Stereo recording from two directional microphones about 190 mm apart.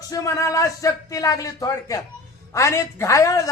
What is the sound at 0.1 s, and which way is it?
A man's voice, 15° left (ahead or behind).